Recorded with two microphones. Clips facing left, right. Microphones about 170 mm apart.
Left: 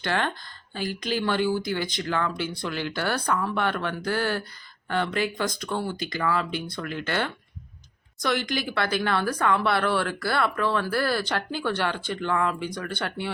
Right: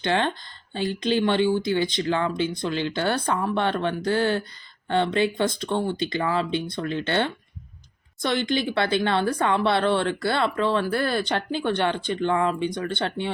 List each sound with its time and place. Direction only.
0.0 s speech: 20° right (ahead or behind)